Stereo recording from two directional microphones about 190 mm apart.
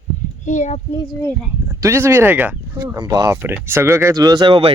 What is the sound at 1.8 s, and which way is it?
Speech, 15° right (ahead or behind).